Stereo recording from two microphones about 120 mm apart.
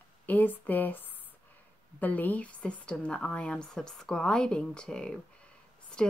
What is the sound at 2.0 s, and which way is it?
A woman's voice, 15° left (ahead or behind).